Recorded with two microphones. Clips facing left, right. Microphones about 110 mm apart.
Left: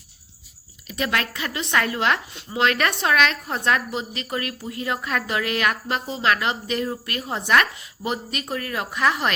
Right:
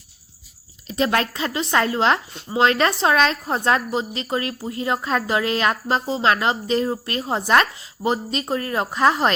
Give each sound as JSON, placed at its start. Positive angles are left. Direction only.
{"t": 0.9, "sound": "a woman's voice", "side_deg": -30}